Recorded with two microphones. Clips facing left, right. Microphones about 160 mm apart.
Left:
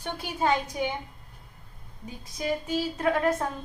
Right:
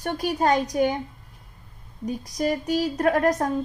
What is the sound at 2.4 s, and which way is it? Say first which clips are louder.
A woman's voice: right 4 dB; 40° right (ahead or behind).